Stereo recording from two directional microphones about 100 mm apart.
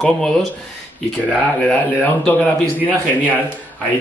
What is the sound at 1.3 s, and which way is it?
A woman's voice, 15° left (ahead or behind).